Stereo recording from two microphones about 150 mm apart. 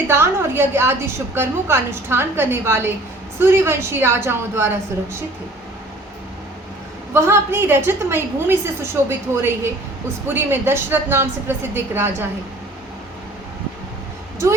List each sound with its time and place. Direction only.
0.1 s a woman's voice: 15° right (ahead or behind)
7.1 s a woman's voice: 15° right (ahead or behind)